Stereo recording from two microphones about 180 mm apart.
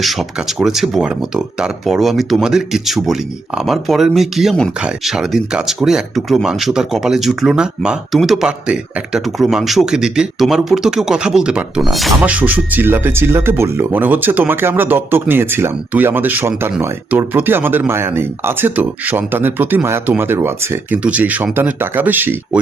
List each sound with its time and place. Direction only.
0.0 s speech: centre (ahead or behind)